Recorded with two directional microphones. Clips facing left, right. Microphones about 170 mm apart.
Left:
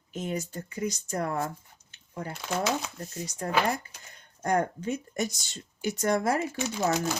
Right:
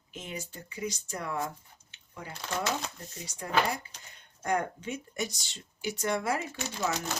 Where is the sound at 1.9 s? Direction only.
40° left (ahead or behind).